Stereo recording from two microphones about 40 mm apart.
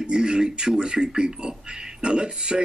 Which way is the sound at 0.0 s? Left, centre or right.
Centre.